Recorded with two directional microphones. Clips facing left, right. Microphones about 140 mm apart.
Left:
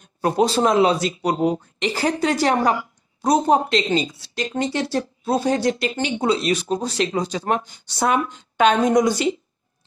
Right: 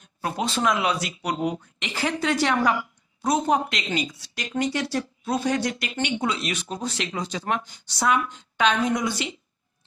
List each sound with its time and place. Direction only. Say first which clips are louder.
0.2 s speech: left 7 dB; 35° left (ahead or behind)
8.5 s a woman's voice: left 6 dB; 45° left (ahead or behind)